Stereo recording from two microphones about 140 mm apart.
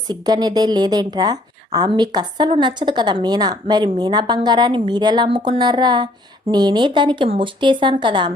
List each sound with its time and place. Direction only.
0.1 s a woman's voice: 30° right (ahead or behind)